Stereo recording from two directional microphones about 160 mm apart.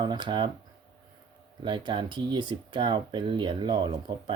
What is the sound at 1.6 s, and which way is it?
Speech, 30° right (ahead or behind).